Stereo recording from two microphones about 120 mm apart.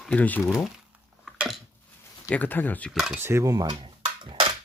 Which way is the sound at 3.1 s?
20° right (ahead or behind).